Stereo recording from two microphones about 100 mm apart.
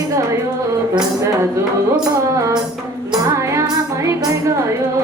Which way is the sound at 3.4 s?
30° right (ahead or behind).